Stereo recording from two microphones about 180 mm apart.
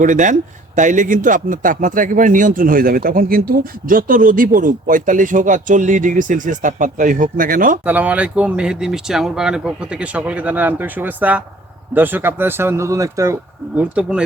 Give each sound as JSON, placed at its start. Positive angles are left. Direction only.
{"t": 0.0, "sound": "speech", "side_deg": -45}
{"t": 7.9, "sound": "speech", "side_deg": -10}
{"t": 13.7, "sound": "speech", "side_deg": -5}